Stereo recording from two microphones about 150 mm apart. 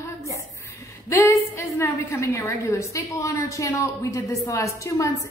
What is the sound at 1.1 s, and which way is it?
A woman's voice, 20° left (ahead or behind).